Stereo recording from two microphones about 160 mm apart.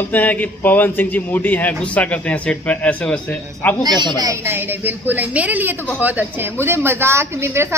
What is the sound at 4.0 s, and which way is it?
A woman's voice, 25° right (ahead or behind).